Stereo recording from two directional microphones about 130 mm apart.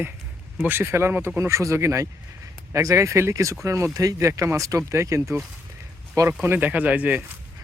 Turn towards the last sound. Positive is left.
turn(degrees=-10)  # may be behind; listen again after turning